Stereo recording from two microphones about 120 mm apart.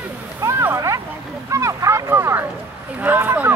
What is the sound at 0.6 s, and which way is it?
Speech, 25° right (ahead or behind).